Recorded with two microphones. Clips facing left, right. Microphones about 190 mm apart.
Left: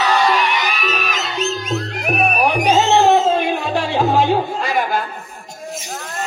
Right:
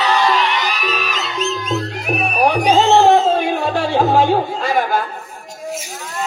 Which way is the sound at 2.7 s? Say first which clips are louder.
Right 2 dB; 50° right (ahead or behind).